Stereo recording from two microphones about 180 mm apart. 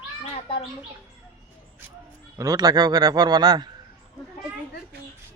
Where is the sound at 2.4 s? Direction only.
20° right (ahead or behind).